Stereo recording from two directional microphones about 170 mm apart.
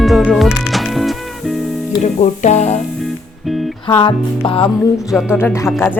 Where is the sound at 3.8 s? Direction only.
30° left (ahead or behind).